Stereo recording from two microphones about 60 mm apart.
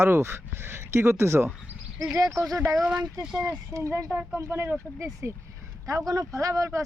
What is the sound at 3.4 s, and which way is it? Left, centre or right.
Speech, right.